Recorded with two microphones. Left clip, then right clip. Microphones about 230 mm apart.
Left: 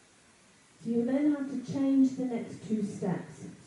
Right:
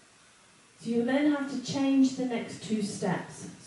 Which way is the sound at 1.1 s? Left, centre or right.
Centre.